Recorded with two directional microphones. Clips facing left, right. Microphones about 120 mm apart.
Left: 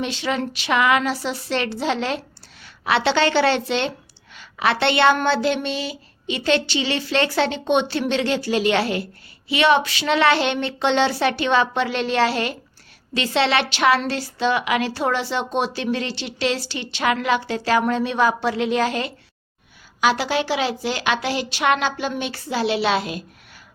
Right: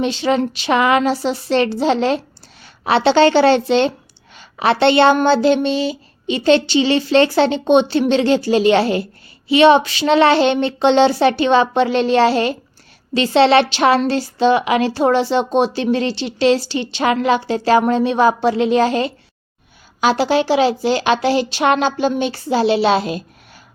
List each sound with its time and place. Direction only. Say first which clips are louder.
0.0 s a woman's voice: right 7 dB; 30° right (ahead or behind)